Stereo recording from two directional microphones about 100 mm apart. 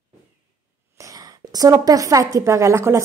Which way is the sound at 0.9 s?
35° right (ahead or behind).